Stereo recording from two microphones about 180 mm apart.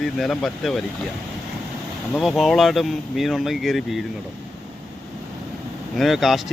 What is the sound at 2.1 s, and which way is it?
Speech, centre (ahead or behind).